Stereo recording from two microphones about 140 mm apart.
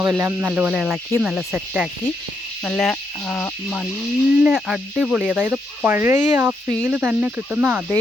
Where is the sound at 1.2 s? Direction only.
5° right (ahead or behind).